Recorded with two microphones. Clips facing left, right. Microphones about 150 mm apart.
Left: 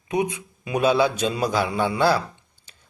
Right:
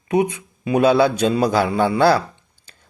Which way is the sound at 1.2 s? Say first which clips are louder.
Right 6 dB; 35° right (ahead or behind).